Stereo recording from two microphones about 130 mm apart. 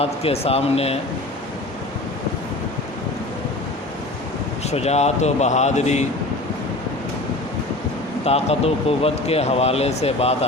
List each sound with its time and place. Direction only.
0.0 s speech: 50° left (ahead or behind)
4.7 s speech: 55° left (ahead or behind)
8.2 s speech: 50° left (ahead or behind)